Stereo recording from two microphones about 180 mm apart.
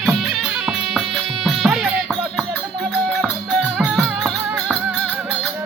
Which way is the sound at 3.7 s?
Centre (ahead or behind).